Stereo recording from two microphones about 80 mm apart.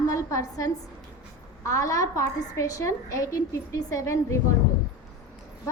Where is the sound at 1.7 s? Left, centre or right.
Left.